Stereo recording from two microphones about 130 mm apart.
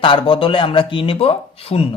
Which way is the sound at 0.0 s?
40° left (ahead or behind).